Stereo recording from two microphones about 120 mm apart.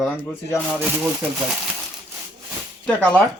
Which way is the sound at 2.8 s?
10° left (ahead or behind).